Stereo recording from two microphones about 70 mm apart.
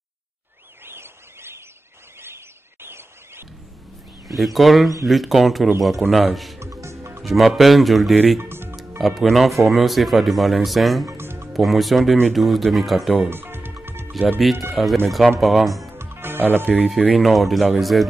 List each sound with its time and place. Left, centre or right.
0.8 s a sound: right
2.2 s bird: right
4.3 s speech: centre
6.7 s music: right
7.2 s speech: centre
8.4 s music: right
9.0 s speech: centre
11.1 s music: right
11.5 s speech: centre
13.3 s music: right
14.7 s speech: centre
16.0 s music: right
17.1 s speech: centre